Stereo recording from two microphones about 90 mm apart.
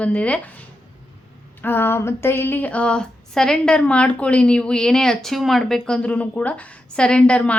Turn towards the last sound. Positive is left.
turn(degrees=10)  # may be behind; listen again after turning